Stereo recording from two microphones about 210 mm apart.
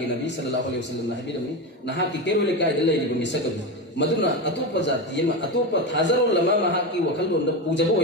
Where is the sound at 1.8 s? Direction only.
55° left (ahead or behind).